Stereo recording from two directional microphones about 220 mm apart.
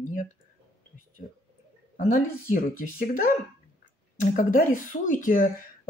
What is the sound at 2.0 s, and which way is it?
Speech, 35° left (ahead or behind).